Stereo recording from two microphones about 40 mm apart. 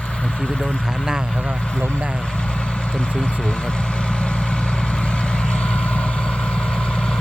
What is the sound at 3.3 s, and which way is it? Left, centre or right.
Vehicle, left.